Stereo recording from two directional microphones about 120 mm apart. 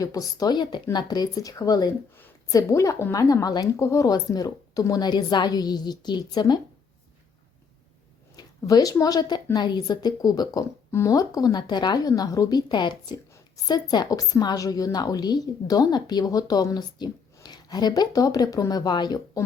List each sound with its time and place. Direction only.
0.0 s a woman's voice: 30° left (ahead or behind)
8.4 s a woman's voice: 30° left (ahead or behind)